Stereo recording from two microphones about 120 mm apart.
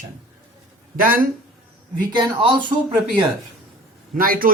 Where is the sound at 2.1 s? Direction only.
40° right (ahead or behind).